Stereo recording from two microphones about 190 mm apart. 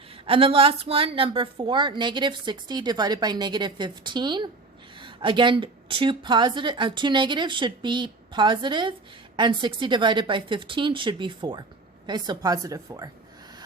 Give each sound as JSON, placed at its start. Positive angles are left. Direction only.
{"t": 0.3, "sound": "a woman's voice", "side_deg": -30}